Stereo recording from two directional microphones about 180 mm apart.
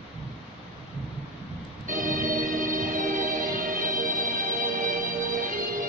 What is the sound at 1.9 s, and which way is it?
Organ, 50° right (ahead or behind).